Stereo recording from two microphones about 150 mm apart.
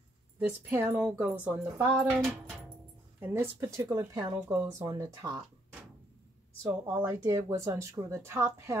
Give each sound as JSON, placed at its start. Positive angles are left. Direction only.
{"t": 0.4, "sound": "speech", "side_deg": -15}
{"t": 6.6, "sound": "speech", "side_deg": -15}